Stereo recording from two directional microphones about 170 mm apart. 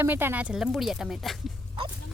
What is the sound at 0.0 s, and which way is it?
Speech, 10° right (ahead or behind).